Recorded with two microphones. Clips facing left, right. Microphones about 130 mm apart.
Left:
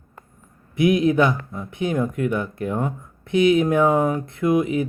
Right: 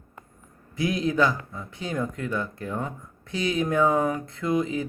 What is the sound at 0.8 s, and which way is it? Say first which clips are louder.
Speech: left 6 dB; 20° left (ahead or behind).